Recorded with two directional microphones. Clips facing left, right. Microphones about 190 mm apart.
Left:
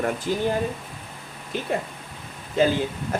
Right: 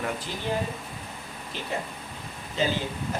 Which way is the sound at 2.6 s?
55° left (ahead or behind).